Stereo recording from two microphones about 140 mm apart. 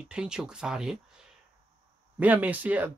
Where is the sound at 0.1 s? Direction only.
5° right (ahead or behind).